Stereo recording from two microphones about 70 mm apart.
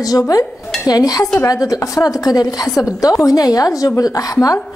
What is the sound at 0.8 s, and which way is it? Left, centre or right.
Dishes, left.